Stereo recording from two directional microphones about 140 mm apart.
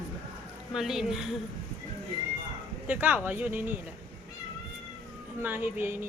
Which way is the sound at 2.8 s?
10° right (ahead or behind).